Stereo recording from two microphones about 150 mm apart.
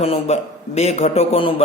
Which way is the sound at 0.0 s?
45° left (ahead or behind).